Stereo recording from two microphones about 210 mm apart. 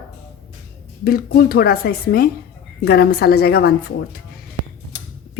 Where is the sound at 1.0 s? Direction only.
45° left (ahead or behind).